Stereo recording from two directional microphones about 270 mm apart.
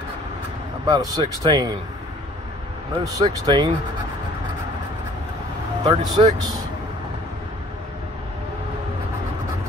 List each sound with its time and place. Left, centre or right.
0.8 s speech: centre
3.0 s speech: centre
5.9 s speech: centre